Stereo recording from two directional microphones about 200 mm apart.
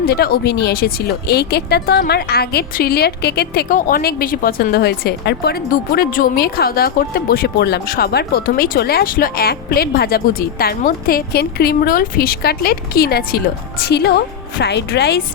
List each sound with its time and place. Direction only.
0.0 s a woman's voice: 50° left (ahead or behind)